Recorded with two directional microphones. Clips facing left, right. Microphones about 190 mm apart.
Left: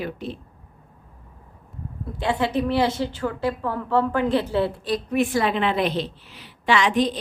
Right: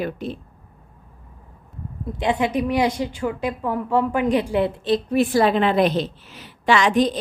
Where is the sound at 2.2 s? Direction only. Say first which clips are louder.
Right 2 dB; 15° right (ahead or behind).